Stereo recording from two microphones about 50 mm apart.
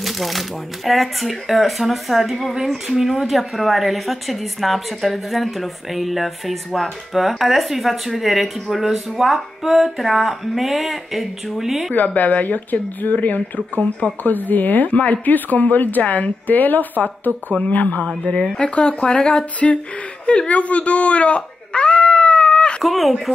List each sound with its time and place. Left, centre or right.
0.0 s speech: centre
11.9 s speech: left
20.2 s a sound: left
22.8 s speech: centre